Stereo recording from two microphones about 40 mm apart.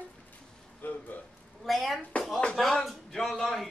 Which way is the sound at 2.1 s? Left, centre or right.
Left.